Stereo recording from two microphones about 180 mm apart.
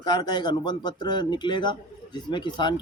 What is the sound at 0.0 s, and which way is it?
Speech, 20° left (ahead or behind).